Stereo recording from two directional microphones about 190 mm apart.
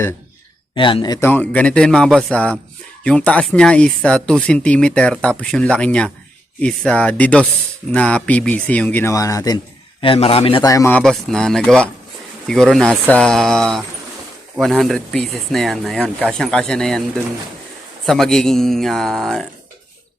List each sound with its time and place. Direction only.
0.8 s speech: 25° left (ahead or behind)
1.3 s speech: 5° left (ahead or behind)
10.0 s a man's voice: 30° left (ahead or behind)
10.6 s speech: 15° left (ahead or behind)
10.9 s speech: 5° left (ahead or behind)
18.0 s speech: centre (ahead or behind)